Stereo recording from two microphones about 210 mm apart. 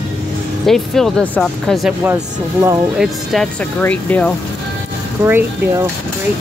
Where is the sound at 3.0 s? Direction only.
Centre (ahead or behind).